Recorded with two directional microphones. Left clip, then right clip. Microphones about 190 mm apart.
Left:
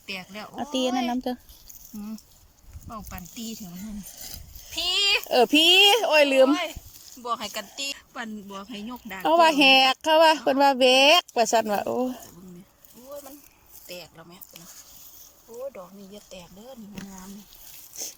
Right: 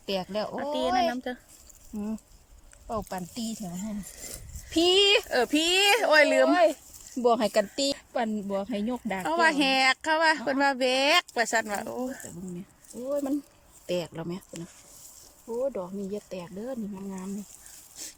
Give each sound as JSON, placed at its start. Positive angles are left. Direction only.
{"t": 0.0, "sound": "speech", "side_deg": -30}
{"t": 0.9, "sound": "speech", "side_deg": 10}
{"t": 2.9, "sound": "speech", "side_deg": -30}
{"t": 4.7, "sound": "speech", "side_deg": -35}
{"t": 5.3, "sound": "speech", "side_deg": 10}
{"t": 6.5, "sound": "speech", "side_deg": -25}
{"t": 9.2, "sound": "speech", "side_deg": 10}
{"t": 13.8, "sound": "speech", "side_deg": -35}
{"t": 15.7, "sound": "speech", "side_deg": -25}